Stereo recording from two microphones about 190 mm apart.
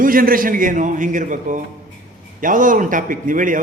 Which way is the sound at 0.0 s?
50° right (ahead or behind).